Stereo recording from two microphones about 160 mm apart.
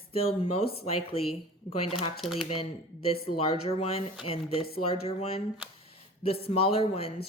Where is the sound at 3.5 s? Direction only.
40° left (ahead or behind).